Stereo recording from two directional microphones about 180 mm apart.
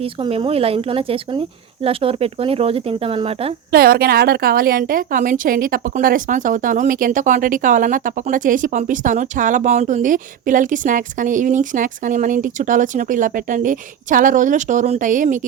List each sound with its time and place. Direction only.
0.0 s speech: 30° right (ahead or behind)
3.7 s a woman's voice: 60° right (ahead or behind)